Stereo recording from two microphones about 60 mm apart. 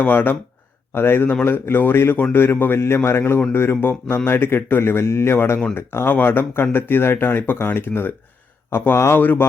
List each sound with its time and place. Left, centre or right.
0.0 s speech: left